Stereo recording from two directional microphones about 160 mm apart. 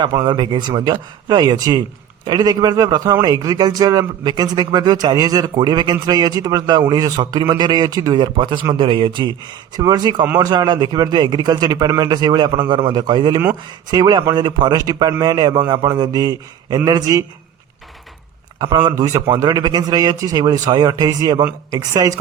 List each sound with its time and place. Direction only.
0.0 s a man's voice: 25° right (ahead or behind)
18.6 s a man's voice: 25° right (ahead or behind)